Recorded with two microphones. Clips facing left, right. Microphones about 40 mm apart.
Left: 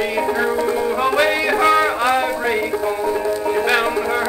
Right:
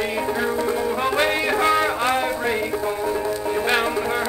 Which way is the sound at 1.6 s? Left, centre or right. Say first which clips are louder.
Left 5 dB; left.